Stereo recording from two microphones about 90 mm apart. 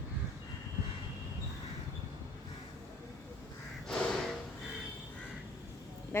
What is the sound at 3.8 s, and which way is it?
Crow, 10° left (ahead or behind).